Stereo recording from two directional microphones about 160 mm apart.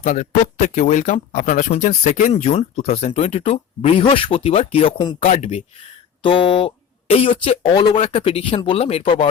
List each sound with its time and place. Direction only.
0.0 s speech: 55° left (ahead or behind); by 9.3 s 35° left (ahead or behind)